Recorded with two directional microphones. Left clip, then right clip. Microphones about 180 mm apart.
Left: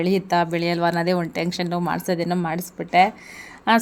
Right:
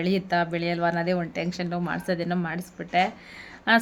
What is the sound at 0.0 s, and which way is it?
Speech, 15° left (ahead or behind).